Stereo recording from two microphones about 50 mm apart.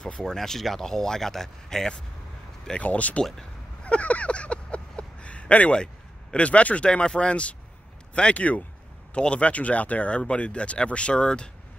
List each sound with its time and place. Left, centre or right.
0.2 s speech: centre
2.8 s speech: left
3.8 s a sound: left
6.3 s speech: left